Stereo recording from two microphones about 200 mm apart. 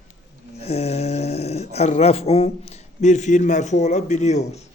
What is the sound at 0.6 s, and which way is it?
A man's voice, 30° left (ahead or behind).